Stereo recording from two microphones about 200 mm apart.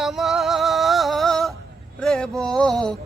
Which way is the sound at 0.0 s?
Centre (ahead or behind).